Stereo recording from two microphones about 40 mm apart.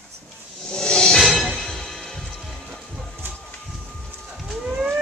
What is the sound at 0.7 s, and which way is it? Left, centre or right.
Music, left.